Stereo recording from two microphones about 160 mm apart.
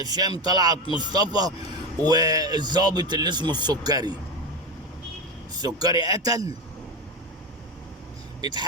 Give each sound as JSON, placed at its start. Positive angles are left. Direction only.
{"t": 0.0, "sound": "speech", "side_deg": -25}
{"t": 5.5, "sound": "speech", "side_deg": -25}
{"t": 8.4, "sound": "speech", "side_deg": -25}